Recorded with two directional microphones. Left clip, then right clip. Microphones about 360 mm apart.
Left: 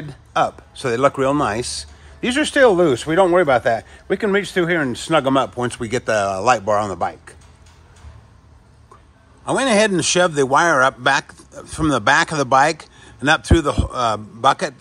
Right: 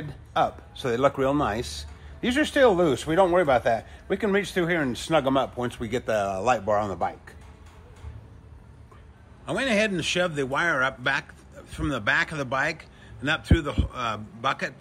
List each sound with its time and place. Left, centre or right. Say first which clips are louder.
0.1 s speech: left 6 dB; left
9.5 s a man's voice: left 8 dB; centre